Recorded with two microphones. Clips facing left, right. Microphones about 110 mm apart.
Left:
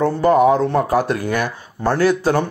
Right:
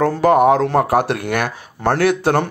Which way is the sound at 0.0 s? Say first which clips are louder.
Right 1 dB; 75° right (ahead or behind).